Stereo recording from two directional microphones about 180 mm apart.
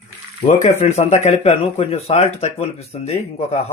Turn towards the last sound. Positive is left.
turn(degrees=35)  # may be behind; listen again after turning